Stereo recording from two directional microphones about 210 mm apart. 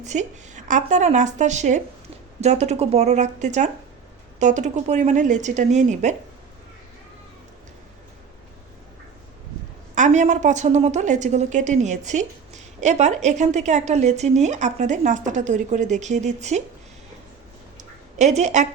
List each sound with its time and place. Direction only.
0.0 s a woman's voice: 35° right (ahead or behind)
9.9 s a woman's voice: 35° right (ahead or behind)
17.7 s a sound: 35° right (ahead or behind)